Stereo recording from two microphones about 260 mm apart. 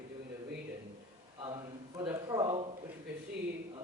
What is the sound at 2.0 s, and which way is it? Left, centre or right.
Speech, centre.